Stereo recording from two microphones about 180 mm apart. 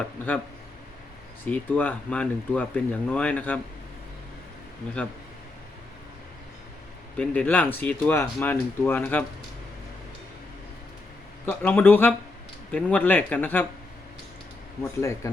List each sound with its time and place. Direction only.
1.5 s speech: 10° left (ahead or behind)
7.2 s speech: 10° left (ahead or behind)
11.4 s speech: 10° left (ahead or behind)
14.8 s speech: 15° left (ahead or behind)